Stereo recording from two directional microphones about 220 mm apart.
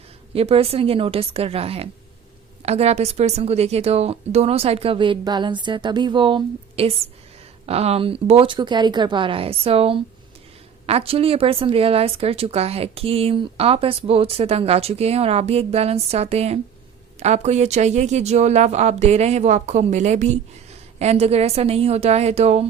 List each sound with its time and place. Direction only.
0.3 s a woman's voice: 25° right (ahead or behind)